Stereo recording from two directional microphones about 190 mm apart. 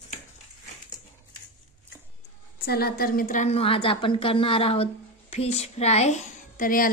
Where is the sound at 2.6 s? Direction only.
55° left (ahead or behind).